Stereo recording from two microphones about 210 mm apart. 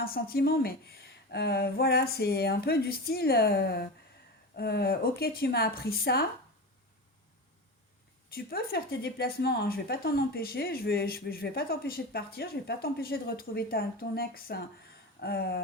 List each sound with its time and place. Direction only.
0.0 s speech: 45° left (ahead or behind)
8.4 s speech: 45° left (ahead or behind)